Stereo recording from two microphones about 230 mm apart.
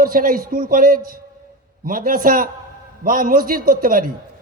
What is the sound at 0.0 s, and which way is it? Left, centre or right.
A man's voice, right.